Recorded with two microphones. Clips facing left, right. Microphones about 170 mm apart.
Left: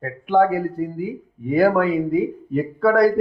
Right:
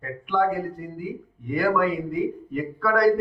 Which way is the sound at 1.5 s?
40° left (ahead or behind).